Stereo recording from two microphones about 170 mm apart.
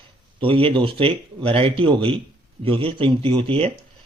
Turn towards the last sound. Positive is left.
turn(degrees=-35)  # may be behind; listen again after turning